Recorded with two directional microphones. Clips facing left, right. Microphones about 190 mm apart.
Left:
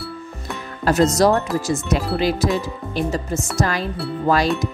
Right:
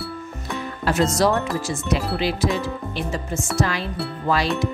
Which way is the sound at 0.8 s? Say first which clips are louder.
Left 4 dB; 40° left (ahead or behind).